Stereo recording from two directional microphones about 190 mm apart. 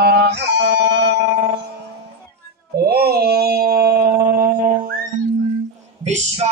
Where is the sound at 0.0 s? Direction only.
65° right (ahead or behind).